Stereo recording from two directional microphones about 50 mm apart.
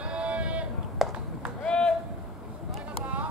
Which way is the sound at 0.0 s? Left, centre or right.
Right.